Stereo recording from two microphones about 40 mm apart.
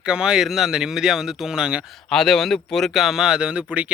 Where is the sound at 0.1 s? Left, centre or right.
Right.